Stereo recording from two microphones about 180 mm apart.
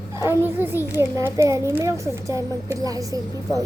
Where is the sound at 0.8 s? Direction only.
15° left (ahead or behind).